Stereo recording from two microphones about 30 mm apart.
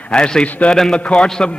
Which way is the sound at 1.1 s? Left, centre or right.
Left.